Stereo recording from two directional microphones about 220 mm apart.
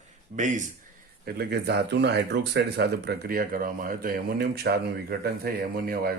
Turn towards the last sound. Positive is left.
turn(degrees=-45)  # may be behind; listen again after turning